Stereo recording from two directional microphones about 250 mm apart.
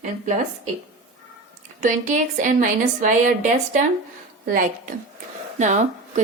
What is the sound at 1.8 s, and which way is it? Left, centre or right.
A woman's voice, right.